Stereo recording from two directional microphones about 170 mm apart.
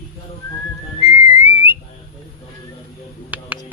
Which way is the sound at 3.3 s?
10° right (ahead or behind).